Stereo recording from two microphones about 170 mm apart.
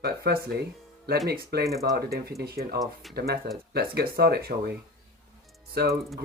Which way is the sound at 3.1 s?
65° right (ahead or behind).